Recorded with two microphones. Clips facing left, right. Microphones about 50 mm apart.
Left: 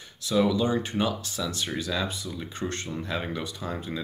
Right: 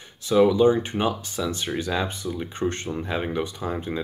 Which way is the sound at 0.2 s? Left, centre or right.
Right.